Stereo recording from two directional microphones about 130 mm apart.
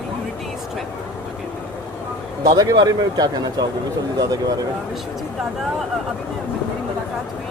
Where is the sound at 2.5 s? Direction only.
30° right (ahead or behind).